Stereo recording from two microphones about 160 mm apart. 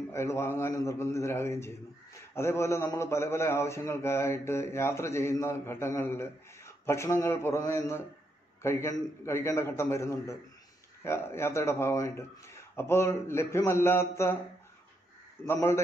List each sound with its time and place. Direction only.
0.1 s a man's voice: 15° left (ahead or behind)
15.4 s a man's voice: 15° left (ahead or behind)